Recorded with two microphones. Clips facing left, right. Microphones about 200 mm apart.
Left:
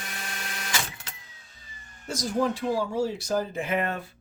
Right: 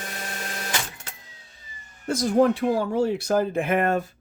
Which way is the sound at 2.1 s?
60° right (ahead or behind).